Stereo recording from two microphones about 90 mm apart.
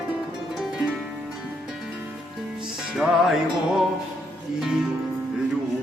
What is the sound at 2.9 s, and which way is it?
Music, 5° right (ahead or behind).